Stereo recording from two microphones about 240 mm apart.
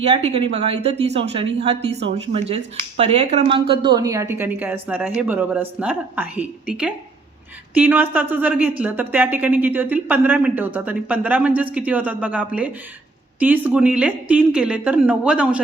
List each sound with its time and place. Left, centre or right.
0.1 s a woman's voice: right; by 15.6 s centre